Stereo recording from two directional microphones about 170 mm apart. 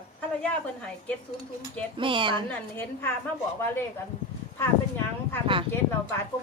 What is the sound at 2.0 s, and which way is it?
Speech, 30° right (ahead or behind).